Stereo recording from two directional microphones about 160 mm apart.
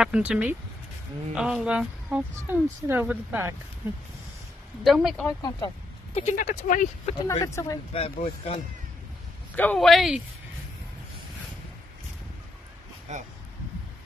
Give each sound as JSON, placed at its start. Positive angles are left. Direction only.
{"t": 0.0, "sound": "speech", "side_deg": -5}
{"t": 4.8, "sound": "speech", "side_deg": 0}
{"t": 5.2, "sound": "speech", "side_deg": 25}
{"t": 6.1, "sound": "speech", "side_deg": 50}
{"t": 7.2, "sound": "speech", "side_deg": 20}
{"t": 7.9, "sound": "speech", "side_deg": 35}
{"t": 9.6, "sound": "speech", "side_deg": 5}